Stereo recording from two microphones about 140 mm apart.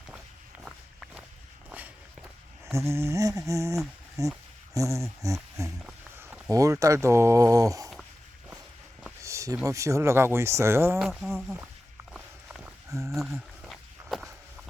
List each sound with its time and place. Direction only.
2.6 s speech: 20° right (ahead or behind)
4.7 s a sound: 20° right (ahead or behind)
6.1 s speech: 15° right (ahead or behind)
9.2 s a sound: 20° right (ahead or behind)
9.6 s speech: 20° right (ahead or behind)
11.0 s speech: centre (ahead or behind)
12.1 s walk: 5° right (ahead or behind)
13.1 s speech: centre (ahead or behind)
13.7 s walk: centre (ahead or behind)